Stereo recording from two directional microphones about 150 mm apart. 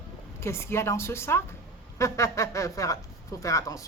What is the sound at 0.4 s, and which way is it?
A woman's voice, 15° left (ahead or behind).